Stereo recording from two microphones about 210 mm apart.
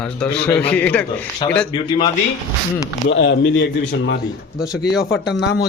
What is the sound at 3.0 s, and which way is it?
Speech, 55° left (ahead or behind).